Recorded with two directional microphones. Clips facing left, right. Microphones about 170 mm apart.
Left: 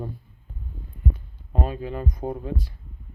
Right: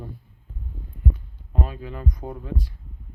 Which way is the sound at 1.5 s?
30° left (ahead or behind).